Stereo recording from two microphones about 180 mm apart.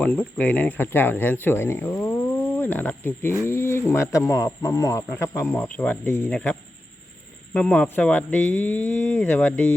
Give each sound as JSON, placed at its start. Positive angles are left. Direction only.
{"t": 0.0, "sound": "speech", "side_deg": 10}